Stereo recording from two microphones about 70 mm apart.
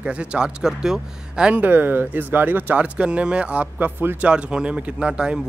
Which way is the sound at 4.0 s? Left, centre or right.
Right.